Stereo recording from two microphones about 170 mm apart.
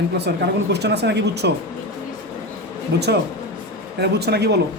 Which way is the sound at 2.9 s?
80° right.